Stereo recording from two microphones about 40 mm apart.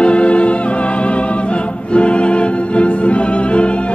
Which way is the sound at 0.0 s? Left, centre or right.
Left.